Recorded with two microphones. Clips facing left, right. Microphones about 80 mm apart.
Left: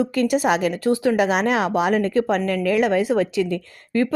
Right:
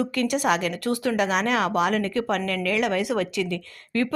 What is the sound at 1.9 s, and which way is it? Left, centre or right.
Speech, left.